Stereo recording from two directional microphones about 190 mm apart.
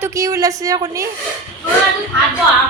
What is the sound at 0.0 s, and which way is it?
Speech, 15° right (ahead or behind).